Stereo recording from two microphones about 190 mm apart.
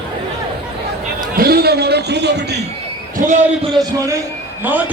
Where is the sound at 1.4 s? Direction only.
55° right (ahead or behind).